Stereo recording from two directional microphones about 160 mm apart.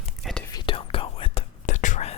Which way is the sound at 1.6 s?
50° left (ahead or behind).